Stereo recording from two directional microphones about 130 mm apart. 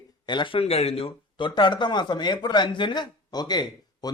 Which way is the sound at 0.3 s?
40° left (ahead or behind).